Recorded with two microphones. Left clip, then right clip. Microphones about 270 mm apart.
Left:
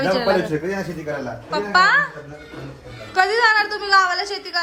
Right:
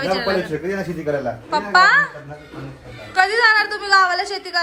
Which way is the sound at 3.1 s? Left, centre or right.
Centre.